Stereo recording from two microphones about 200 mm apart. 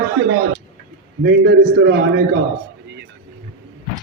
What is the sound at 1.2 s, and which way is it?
A man's voice, 60° right (ahead or behind).